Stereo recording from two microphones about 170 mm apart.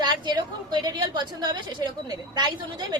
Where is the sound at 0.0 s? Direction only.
25° right (ahead or behind).